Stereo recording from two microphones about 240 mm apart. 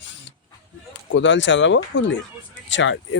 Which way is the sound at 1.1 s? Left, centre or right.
Left.